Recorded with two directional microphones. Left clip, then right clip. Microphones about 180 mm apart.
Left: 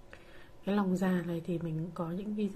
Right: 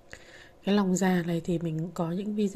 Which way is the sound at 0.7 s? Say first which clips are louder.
Right 6 dB; 25° right (ahead or behind).